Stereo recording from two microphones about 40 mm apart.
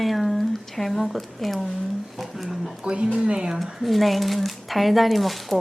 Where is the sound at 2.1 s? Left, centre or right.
Centre.